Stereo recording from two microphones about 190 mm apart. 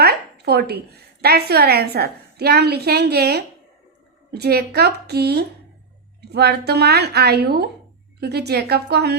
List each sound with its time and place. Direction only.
0.0 s a woman's voice: 55° right (ahead or behind)